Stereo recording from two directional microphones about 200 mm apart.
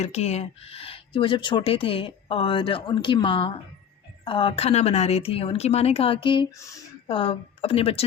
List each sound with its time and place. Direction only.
0.0 s speech: 35° left (ahead or behind)